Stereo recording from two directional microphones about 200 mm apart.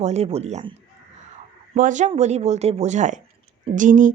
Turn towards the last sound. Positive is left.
turn(degrees=-40)  # may be behind; listen again after turning